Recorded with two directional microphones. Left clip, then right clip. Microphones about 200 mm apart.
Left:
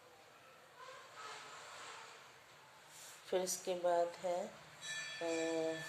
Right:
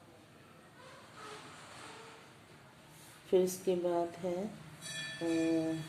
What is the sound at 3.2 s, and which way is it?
Speech, 10° right (ahead or behind).